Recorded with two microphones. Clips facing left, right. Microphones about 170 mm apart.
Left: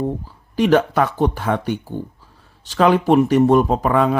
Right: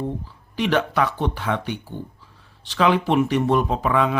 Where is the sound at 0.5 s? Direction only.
45° left (ahead or behind).